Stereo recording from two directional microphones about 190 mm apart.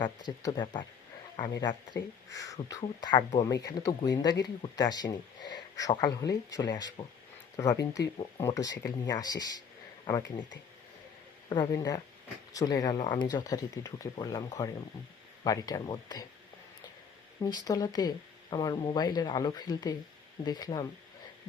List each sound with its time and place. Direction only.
0.0 s speech: 20° left (ahead or behind)
11.4 s speech: 20° left (ahead or behind)
17.4 s speech: 20° left (ahead or behind)